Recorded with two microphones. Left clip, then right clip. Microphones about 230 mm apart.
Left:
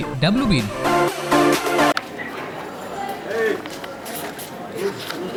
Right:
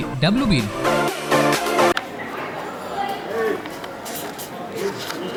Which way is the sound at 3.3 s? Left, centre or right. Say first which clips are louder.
Left 3 dB; centre.